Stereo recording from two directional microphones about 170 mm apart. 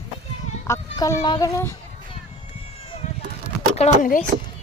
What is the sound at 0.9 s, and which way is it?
Speech, 20° left (ahead or behind).